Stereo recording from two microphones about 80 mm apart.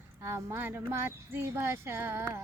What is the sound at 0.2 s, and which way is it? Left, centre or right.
Speech, right.